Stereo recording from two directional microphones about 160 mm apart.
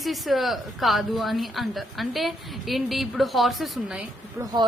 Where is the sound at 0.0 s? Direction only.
Centre (ahead or behind).